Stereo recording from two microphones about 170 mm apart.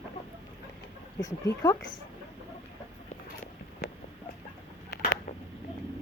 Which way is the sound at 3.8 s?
90° left.